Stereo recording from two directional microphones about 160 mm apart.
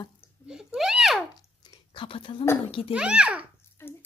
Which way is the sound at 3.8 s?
15° left (ahead or behind).